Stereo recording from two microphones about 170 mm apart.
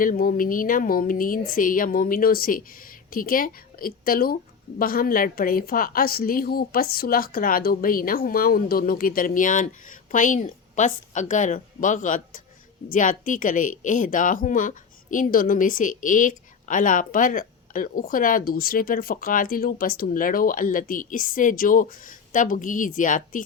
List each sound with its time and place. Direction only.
0.0 s a woman's voice: 55° left (ahead or behind)